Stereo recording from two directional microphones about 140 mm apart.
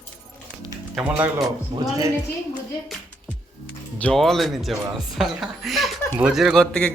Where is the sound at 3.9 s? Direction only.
5° left (ahead or behind).